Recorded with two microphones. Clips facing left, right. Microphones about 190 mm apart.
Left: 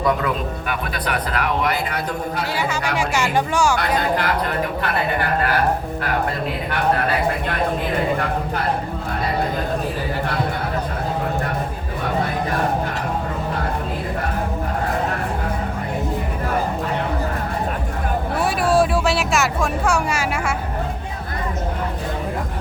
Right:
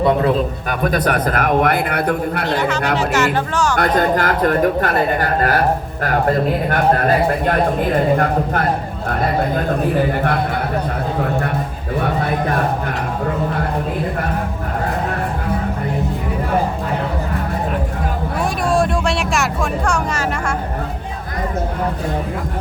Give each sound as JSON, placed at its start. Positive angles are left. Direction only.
{"t": 0.7, "sound": "a man's voice", "side_deg": -45}
{"t": 2.5, "sound": "speech", "side_deg": 10}
{"t": 3.8, "sound": "a man's voice", "side_deg": -45}
{"t": 18.7, "sound": "a sound", "side_deg": 5}